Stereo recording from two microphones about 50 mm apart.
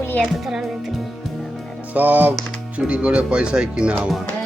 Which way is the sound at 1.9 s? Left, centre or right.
Right.